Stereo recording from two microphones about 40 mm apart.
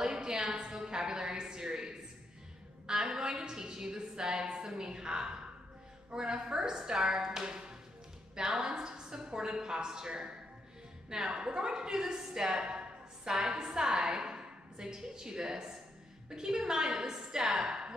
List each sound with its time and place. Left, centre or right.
0.0 s a sound: centre
2.9 s a woman's voice: centre
13.3 s a woman's voice: centre
13.6 s a woman's voice: centre